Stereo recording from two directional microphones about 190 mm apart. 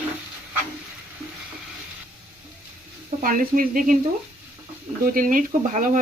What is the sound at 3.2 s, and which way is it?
Speech, 45° right (ahead or behind).